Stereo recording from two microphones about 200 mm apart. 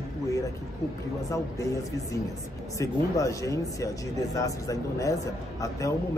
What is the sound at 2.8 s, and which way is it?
Speech, 15° left (ahead or behind).